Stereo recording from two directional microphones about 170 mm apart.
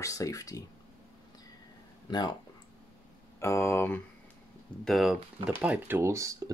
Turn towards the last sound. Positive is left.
turn(degrees=-20)  # may be behind; listen again after turning